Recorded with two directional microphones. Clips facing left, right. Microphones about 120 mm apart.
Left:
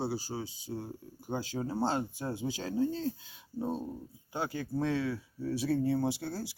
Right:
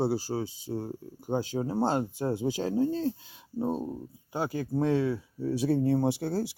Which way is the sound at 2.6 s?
35° right (ahead or behind).